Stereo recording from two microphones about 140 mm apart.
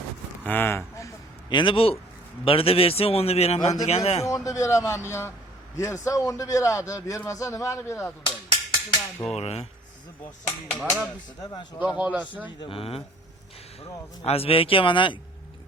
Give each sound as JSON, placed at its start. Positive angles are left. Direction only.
{"t": 0.4, "sound": "a sound", "side_deg": 15}
{"t": 1.5, "sound": "a man's voice", "side_deg": 40}
{"t": 4.4, "sound": "a man's voice", "side_deg": 20}
{"t": 8.2, "sound": "a sound", "side_deg": 35}
{"t": 9.3, "sound": "a man's voice", "side_deg": 50}
{"t": 10.7, "sound": "speech", "side_deg": 5}
{"t": 11.9, "sound": "a man's voice", "side_deg": -10}
{"t": 12.5, "sound": "speech", "side_deg": 40}
{"t": 14.3, "sound": "speech", "side_deg": 45}